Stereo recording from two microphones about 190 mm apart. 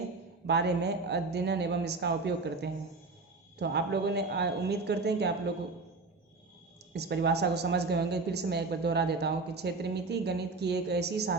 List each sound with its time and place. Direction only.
0.4 s a woman's voice: 60° right (ahead or behind)
6.9 s a woman's voice: 60° right (ahead or behind)